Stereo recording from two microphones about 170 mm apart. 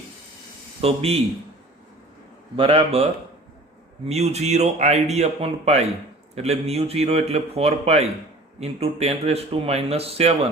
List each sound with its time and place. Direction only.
0.8 s speech: 35° right (ahead or behind)
2.6 s speech: 35° right (ahead or behind)